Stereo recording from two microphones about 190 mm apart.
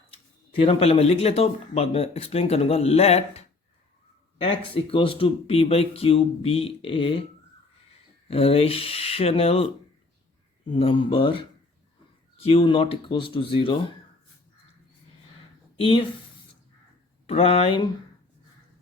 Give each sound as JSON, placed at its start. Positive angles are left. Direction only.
{"t": 0.6, "sound": "speech", "side_deg": 30}
{"t": 8.3, "sound": "speech", "side_deg": 30}
{"t": 10.7, "sound": "speech", "side_deg": 25}
{"t": 12.5, "sound": "speech", "side_deg": 30}
{"t": 15.8, "sound": "speech", "side_deg": 30}
{"t": 17.2, "sound": "speech", "side_deg": 30}